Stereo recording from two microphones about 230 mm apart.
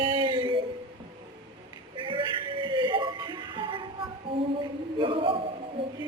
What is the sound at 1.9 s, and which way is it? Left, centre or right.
Music, right.